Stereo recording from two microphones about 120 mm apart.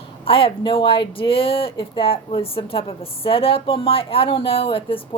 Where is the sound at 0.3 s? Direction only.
50° left (ahead or behind).